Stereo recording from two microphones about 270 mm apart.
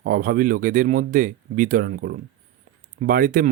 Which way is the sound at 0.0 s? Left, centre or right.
Right.